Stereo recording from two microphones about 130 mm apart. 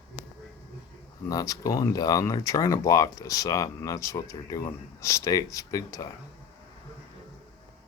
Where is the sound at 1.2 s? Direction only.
25° left (ahead or behind).